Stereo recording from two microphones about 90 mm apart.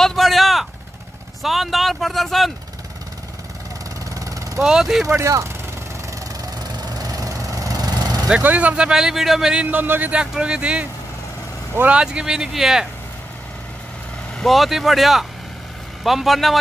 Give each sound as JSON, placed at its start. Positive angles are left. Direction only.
{"t": 0.0, "sound": "a sound", "side_deg": 0}
{"t": 1.4, "sound": "speech", "side_deg": 0}
{"t": 4.1, "sound": "vehicle", "side_deg": -40}
{"t": 4.6, "sound": "a man's voice", "side_deg": -5}
{"t": 5.0, "sound": "speech", "side_deg": -35}
{"t": 6.8, "sound": "vehicle", "side_deg": -45}
{"t": 8.4, "sound": "a man's voice", "side_deg": -15}
{"t": 9.7, "sound": "a man's voice", "side_deg": -20}
{"t": 11.9, "sound": "a man's voice", "side_deg": -10}
{"t": 14.4, "sound": "speech", "side_deg": 0}